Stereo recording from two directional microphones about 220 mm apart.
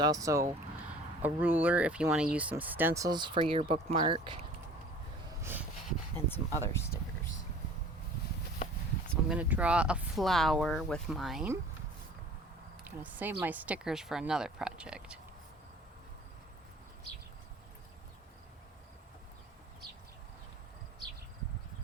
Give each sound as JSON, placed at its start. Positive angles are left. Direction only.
{"t": 0.0, "sound": "speech", "side_deg": -15}
{"t": 5.4, "sound": "a sound", "side_deg": -10}
{"t": 6.1, "sound": "speech", "side_deg": 10}
{"t": 9.3, "sound": "speech", "side_deg": -5}
{"t": 12.8, "sound": "speech", "side_deg": -10}